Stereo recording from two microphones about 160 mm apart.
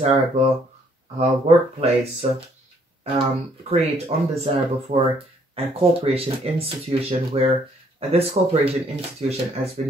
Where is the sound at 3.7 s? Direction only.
40° right (ahead or behind).